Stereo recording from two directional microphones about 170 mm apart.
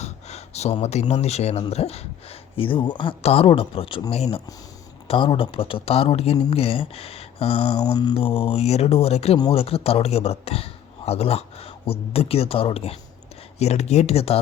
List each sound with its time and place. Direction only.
0.0 s speech: 40° left (ahead or behind)